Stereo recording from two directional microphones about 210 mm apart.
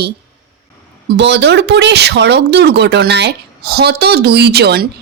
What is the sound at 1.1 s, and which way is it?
Speech, 55° right (ahead or behind).